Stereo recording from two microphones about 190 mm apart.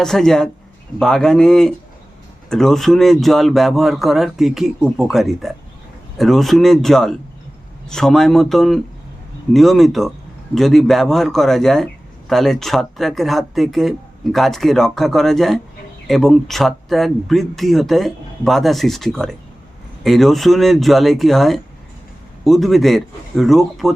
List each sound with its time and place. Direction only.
0.0 s speech: centre (ahead or behind)